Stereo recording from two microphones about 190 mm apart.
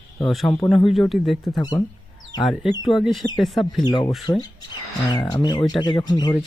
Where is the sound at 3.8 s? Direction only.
20° left (ahead or behind).